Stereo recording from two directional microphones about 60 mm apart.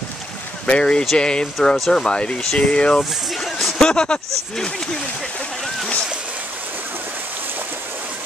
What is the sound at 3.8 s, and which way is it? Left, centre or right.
Speech, centre.